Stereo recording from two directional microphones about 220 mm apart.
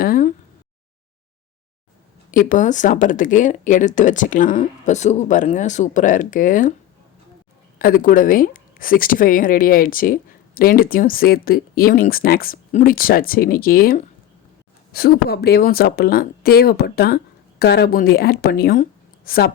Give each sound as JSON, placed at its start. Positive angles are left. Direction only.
{"t": 0.0, "sound": "speech", "side_deg": 40}
{"t": 2.3, "sound": "speech", "side_deg": 35}
{"t": 7.8, "sound": "a woman's voice", "side_deg": 40}